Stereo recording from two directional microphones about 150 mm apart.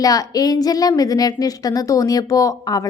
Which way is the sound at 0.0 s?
25° left (ahead or behind).